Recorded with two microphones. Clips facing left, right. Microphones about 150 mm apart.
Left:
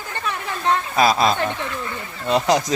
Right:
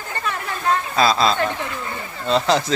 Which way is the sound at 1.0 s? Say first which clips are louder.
Even; 15° left (ahead or behind).